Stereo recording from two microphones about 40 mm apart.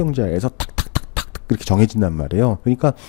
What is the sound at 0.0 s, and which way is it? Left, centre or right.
Speech, left.